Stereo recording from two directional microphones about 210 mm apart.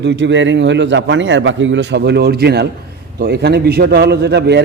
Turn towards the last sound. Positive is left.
turn(degrees=-55)  # may be behind; listen again after turning